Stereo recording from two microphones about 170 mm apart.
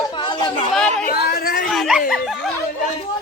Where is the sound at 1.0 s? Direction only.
60° left (ahead or behind).